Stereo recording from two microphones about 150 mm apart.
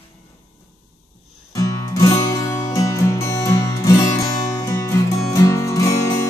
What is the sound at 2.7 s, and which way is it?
Music, 20° left (ahead or behind).